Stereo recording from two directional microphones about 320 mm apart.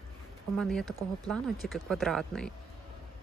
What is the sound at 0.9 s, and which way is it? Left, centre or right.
Speech, centre.